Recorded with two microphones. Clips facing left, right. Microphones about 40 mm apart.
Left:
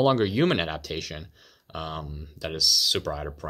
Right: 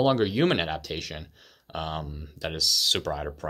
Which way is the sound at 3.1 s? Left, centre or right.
Centre.